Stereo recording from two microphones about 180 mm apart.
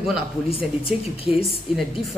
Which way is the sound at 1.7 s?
Centre (ahead or behind).